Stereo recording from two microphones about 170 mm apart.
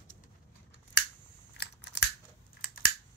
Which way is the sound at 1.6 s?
90° left.